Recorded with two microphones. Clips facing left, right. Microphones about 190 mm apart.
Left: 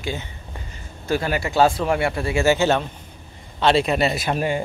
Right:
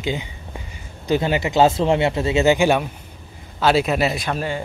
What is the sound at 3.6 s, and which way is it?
Speech, 5° right (ahead or behind).